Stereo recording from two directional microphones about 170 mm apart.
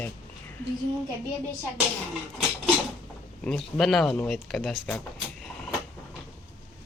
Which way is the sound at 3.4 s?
5° left (ahead or behind).